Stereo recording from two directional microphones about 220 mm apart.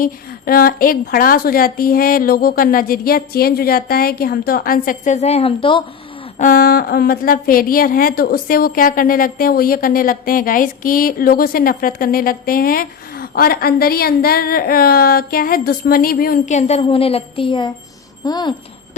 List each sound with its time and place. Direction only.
0.0 s a woman's voice: 40° left (ahead or behind); by 5.8 s 25° left (ahead or behind)
6.4 s a woman's voice: 40° left (ahead or behind); by 18.5 s 20° left (ahead or behind)